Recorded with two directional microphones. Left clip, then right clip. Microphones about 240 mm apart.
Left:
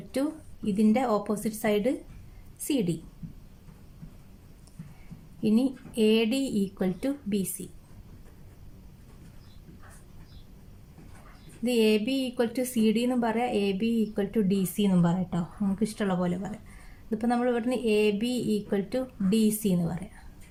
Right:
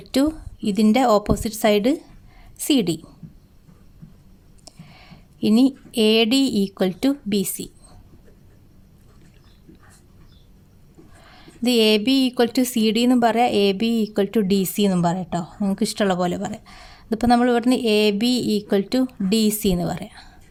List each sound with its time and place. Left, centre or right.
0.1 s speech: right
5.4 s speech: right
11.6 s speech: right